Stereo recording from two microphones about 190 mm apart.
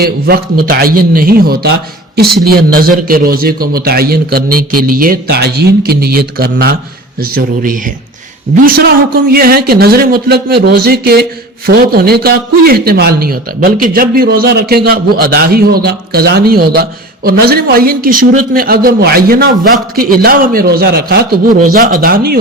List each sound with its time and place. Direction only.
0.3 s a man's voice: 50° right (ahead or behind)